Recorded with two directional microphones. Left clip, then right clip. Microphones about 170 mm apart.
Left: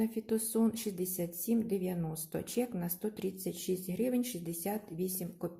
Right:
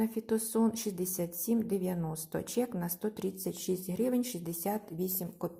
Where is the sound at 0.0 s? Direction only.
Centre (ahead or behind).